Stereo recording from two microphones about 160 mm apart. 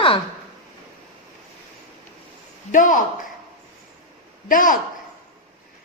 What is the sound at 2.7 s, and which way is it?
Speech, 55° left (ahead or behind).